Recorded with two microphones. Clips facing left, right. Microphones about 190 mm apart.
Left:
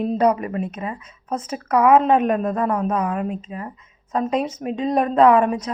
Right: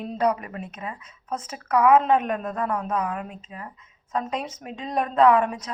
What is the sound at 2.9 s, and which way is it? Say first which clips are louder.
Speech: left 5 dB; 45° left (ahead or behind).